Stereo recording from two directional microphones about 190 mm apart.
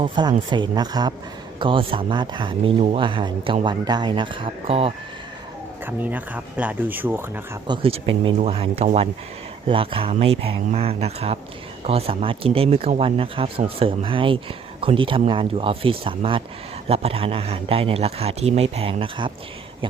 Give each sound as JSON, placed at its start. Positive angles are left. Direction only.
{"t": 0.0, "sound": "speech", "side_deg": -25}
{"t": 5.8, "sound": "speech", "side_deg": -10}
{"t": 7.7, "sound": "speech", "side_deg": -30}